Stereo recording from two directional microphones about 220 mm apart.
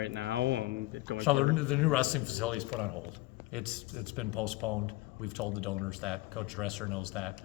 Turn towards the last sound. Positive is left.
turn(degrees=0)  # may be behind; listen again after turning